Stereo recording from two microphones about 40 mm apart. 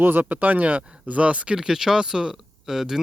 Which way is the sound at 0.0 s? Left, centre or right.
Right.